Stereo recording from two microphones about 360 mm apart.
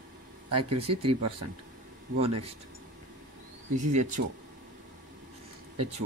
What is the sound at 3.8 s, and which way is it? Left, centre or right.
Speech, right.